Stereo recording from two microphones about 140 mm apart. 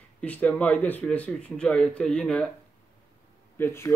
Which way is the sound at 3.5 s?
15° left (ahead or behind).